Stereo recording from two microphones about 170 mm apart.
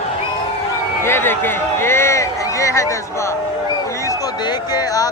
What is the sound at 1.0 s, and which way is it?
Speech, 15° left (ahead or behind).